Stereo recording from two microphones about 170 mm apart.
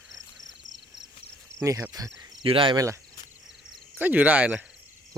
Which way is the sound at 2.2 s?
30° right (ahead or behind).